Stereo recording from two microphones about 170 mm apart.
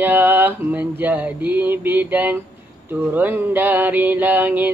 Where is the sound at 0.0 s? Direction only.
10° right (ahead or behind).